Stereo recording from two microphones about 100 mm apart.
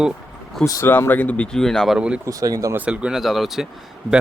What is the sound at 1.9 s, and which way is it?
Speech, 10° right (ahead or behind).